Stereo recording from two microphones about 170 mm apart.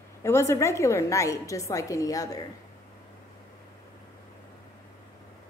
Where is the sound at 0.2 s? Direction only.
15° left (ahead or behind).